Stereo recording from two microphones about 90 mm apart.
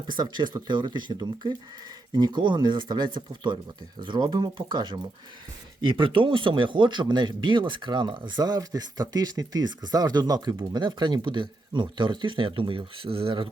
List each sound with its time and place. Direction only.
0.1 s speech: 55° right (ahead or behind)
10.7 s speech: 60° right (ahead or behind); by 13.5 s 75° right (ahead or behind)